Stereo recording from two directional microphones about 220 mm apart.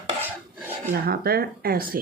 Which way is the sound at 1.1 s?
45° right (ahead or behind).